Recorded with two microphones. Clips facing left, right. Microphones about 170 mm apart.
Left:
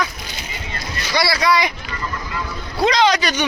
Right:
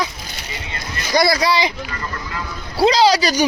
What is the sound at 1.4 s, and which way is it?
Speech, 25° right (ahead or behind).